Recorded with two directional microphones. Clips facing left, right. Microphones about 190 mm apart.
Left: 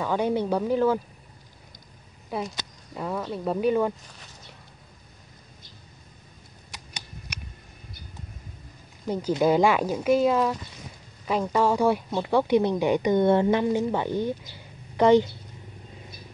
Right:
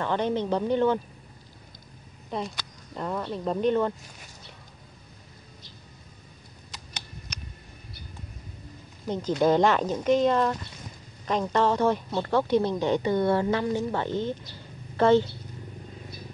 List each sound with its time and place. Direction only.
0.0 s speech: 10° left (ahead or behind)
2.3 s speech: 5° left (ahead or behind)
9.0 s speech: 10° left (ahead or behind)